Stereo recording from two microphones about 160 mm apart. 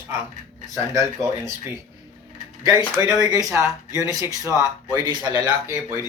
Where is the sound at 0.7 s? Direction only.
20° right (ahead or behind).